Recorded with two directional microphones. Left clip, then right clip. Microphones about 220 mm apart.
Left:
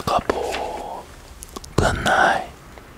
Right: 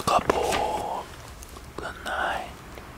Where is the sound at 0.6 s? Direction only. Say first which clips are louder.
Right 1 dB; 5° left (ahead or behind).